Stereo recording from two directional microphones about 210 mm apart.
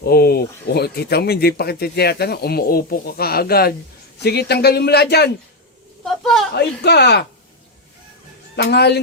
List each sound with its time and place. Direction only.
0.0 s speech: 50° left (ahead or behind)
6.1 s a woman's voice: centre (ahead or behind)
6.5 s speech: 50° left (ahead or behind)
8.5 s speech: 50° left (ahead or behind)